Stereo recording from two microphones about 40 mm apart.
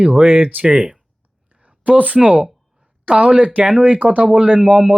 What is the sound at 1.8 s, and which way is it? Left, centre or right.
Speech, right.